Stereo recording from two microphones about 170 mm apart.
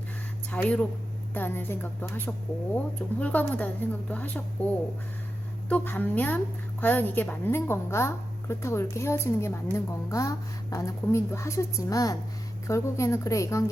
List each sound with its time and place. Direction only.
0.5 s a woman's voice: 5° left (ahead or behind)
5.6 s a woman's voice: 10° left (ahead or behind)